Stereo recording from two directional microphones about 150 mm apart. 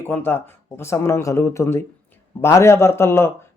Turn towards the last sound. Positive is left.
turn(degrees=15)  # may be behind; listen again after turning